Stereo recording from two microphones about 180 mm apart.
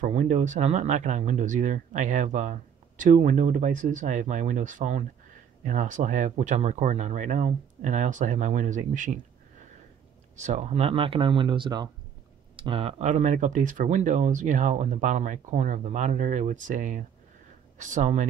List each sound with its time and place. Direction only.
0.0 s speech: 45° right (ahead or behind)
10.3 s speech: 40° right (ahead or behind)